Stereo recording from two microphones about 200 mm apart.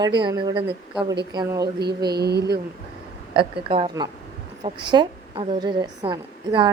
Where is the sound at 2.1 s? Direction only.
55° right (ahead or behind).